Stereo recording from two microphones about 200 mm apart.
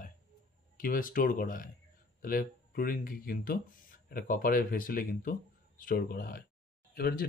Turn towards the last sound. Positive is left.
turn(degrees=50)  # may be behind; listen again after turning